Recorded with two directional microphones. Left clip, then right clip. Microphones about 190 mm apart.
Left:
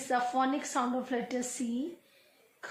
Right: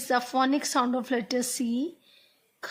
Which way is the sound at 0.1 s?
55° right (ahead or behind).